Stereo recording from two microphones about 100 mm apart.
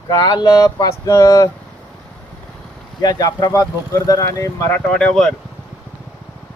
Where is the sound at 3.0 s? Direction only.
40° left (ahead or behind).